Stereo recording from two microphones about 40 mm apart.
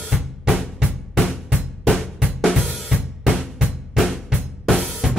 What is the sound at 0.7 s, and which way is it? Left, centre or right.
Drum, centre.